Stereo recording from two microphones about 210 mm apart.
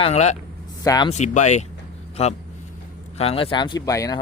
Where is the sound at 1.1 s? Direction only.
35° left (ahead or behind); by 4.2 s 15° left (ahead or behind).